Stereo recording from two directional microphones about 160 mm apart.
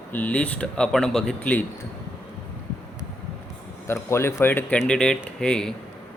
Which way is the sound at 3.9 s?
15° left (ahead or behind).